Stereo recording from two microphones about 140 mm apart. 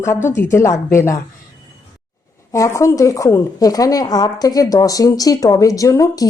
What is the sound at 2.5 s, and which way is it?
A woman's voice, 25° left (ahead or behind).